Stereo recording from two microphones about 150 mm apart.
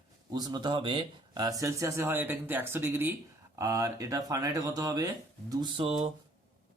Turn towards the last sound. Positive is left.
turn(degrees=-40)  # may be behind; listen again after turning